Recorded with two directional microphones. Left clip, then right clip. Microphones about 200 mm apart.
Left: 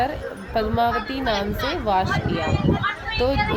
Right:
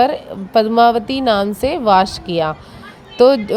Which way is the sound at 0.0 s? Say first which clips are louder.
Right 9 dB; 45° right (ahead or behind).